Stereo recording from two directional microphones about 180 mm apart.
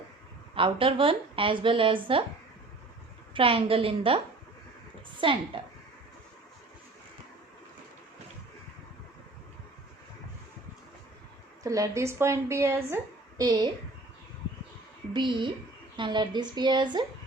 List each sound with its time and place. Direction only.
0.5 s a woman's voice: 30° right (ahead or behind)
3.3 s a woman's voice: 30° right (ahead or behind)
11.6 s a woman's voice: 20° right (ahead or behind)
15.1 s a woman's voice: 25° right (ahead or behind)